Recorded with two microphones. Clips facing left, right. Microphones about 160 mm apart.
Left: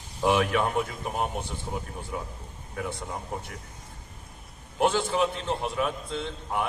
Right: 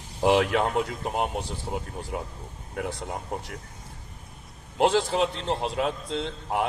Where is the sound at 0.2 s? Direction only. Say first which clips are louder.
Right 2 dB; 30° right (ahead or behind).